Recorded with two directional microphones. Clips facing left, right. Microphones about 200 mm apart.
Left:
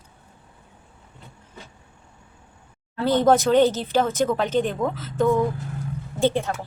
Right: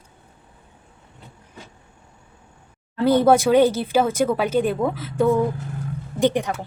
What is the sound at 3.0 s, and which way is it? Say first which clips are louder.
Speech: right 2 dB; 10° right (ahead or behind).